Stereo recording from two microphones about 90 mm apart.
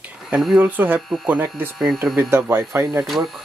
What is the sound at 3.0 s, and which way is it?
Speech, centre (ahead or behind).